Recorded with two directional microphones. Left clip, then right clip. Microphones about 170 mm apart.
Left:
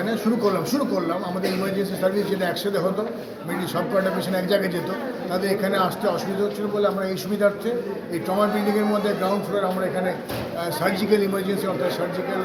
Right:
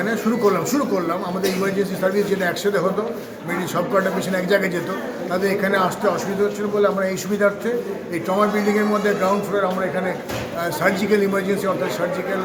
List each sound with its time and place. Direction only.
0.1 s a man's voice: 10° right (ahead or behind)
3.9 s a man's voice: 5° right (ahead or behind)
8.9 s a man's voice: 10° right (ahead or behind)
10.8 s a man's voice: 10° right (ahead or behind)